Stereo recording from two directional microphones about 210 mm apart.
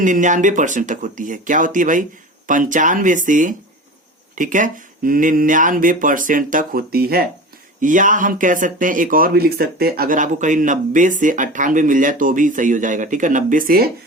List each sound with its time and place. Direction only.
0.0 s speech: 35° right (ahead or behind)